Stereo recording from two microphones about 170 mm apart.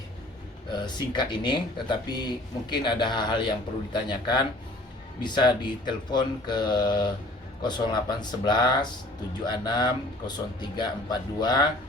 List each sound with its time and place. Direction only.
0.7 s speech: 25° left (ahead or behind)